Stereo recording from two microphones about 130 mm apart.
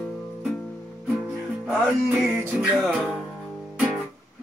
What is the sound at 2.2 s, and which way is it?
Music, 5° right (ahead or behind).